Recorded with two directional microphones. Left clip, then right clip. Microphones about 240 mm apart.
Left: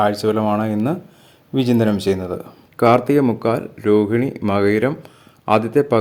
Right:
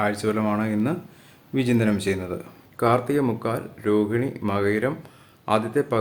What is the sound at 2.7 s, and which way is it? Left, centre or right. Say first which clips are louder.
Speech: left 7 dB; left.